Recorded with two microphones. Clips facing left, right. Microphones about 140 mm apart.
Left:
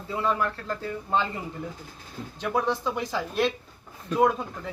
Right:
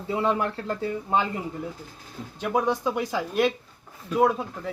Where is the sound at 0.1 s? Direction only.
20° right (ahead or behind).